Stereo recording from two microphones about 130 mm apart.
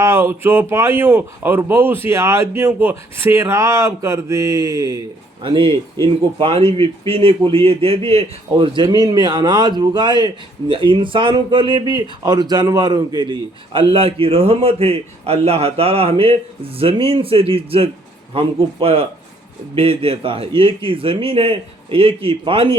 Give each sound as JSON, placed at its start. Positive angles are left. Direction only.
{"t": 0.0, "sound": "speech", "side_deg": -20}
{"t": 5.4, "sound": "speech", "side_deg": -40}
{"t": 7.1, "sound": "a man's voice", "side_deg": -45}
{"t": 13.9, "sound": "a man's voice", "side_deg": -45}